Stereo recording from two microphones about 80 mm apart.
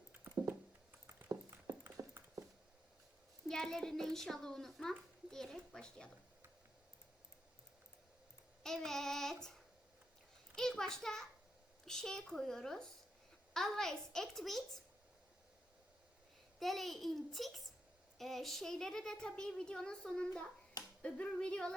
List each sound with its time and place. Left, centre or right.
0.1 s a sound: right
2.0 s dog: right
3.5 s a child's voice: centre
8.6 s a woman's voice: centre
16.6 s a woman's voice: centre